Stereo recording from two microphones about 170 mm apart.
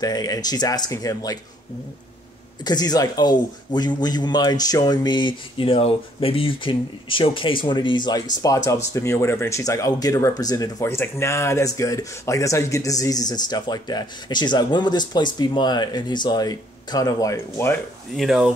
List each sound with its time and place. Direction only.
0.0 s speech: 20° left (ahead or behind)
2.6 s speech: 25° left (ahead or behind)
18.1 s speech: centre (ahead or behind)